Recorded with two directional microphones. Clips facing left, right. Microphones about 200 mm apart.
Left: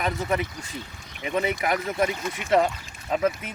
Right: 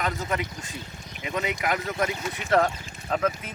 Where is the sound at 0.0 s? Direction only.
20° left (ahead or behind).